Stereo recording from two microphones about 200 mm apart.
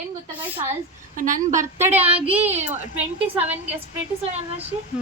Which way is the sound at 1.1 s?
40° right (ahead or behind).